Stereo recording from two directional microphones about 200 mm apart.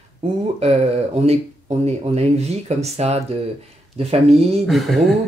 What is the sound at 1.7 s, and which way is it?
Speech, 35° right (ahead or behind).